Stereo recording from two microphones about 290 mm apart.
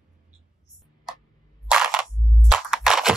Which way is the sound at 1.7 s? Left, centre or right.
Centre.